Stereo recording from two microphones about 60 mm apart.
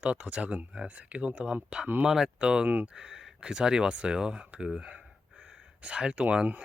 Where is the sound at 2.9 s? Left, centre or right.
Centre.